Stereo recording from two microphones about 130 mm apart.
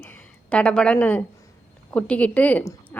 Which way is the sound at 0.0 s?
10° left (ahead or behind).